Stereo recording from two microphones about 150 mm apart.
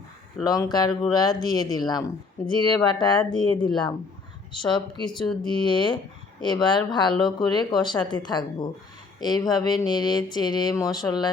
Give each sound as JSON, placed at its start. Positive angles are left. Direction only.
{"t": 0.4, "sound": "speech", "side_deg": 25}
{"t": 3.5, "sound": "speech", "side_deg": 10}
{"t": 4.7, "sound": "speech", "side_deg": 30}